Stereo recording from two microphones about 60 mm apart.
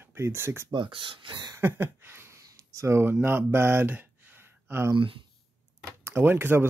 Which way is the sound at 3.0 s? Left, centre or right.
Right.